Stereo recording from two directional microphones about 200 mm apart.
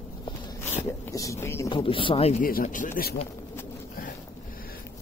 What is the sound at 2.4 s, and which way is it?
Speech, 45° left (ahead or behind).